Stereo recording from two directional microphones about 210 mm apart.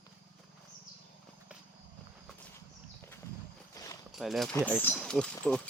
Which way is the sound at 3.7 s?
15° left (ahead or behind).